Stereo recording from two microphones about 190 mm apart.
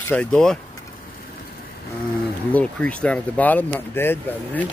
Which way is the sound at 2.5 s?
5° left (ahead or behind).